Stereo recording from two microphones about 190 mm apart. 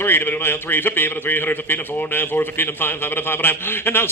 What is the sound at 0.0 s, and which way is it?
A man's voice, 10° left (ahead or behind).